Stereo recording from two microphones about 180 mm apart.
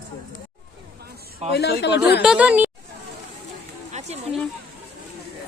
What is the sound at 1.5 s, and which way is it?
Speech, 65° left (ahead or behind).